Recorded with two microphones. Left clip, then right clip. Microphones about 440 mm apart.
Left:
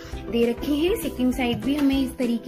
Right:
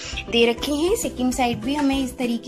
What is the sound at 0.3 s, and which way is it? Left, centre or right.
Music, right.